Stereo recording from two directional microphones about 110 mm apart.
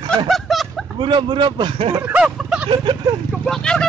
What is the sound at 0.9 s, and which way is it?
A man's voice, 45° right (ahead or behind).